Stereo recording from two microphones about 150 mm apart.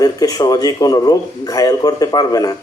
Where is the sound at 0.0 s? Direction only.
25° left (ahead or behind).